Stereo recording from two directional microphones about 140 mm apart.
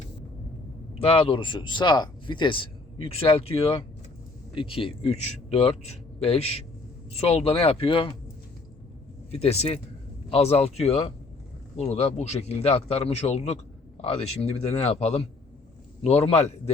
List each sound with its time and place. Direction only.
0.9 s a man's voice: 40° left (ahead or behind)
9.3 s a man's voice: 50° left (ahead or behind)